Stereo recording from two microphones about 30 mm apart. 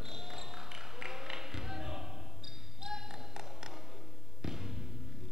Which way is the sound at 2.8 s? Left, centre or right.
Centre.